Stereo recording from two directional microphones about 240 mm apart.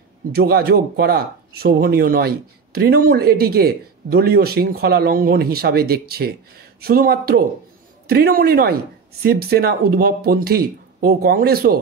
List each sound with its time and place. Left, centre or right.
0.3 s speech: right